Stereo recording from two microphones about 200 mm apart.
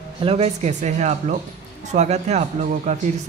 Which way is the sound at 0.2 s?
30° right (ahead or behind).